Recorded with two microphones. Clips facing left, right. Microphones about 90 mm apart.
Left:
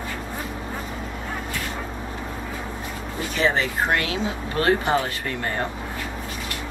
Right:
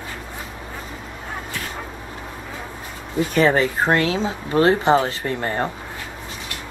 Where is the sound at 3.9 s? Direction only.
30° right (ahead or behind).